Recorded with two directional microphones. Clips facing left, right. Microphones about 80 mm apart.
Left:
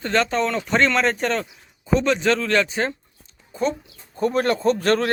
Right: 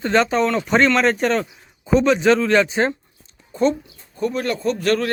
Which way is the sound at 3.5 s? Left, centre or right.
Centre.